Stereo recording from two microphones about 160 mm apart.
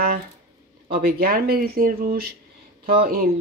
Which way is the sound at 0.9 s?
75° right (ahead or behind).